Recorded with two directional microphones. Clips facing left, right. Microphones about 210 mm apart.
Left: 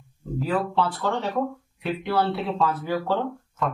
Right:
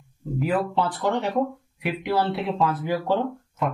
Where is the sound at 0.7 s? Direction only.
15° right (ahead or behind).